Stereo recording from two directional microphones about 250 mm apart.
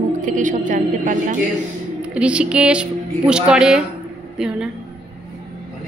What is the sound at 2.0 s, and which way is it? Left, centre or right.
Speech, centre.